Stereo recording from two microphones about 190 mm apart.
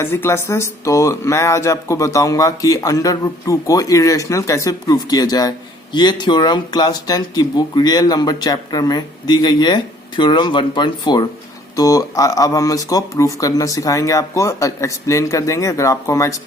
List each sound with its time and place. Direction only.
0.0 s speech: 10° left (ahead or behind)